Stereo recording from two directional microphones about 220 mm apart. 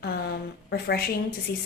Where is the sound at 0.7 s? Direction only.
45° left (ahead or behind).